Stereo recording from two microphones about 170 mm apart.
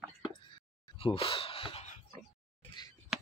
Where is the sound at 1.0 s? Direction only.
30° left (ahead or behind).